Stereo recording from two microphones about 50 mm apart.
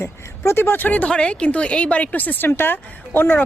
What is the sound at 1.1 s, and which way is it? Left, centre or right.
A woman's voice, left.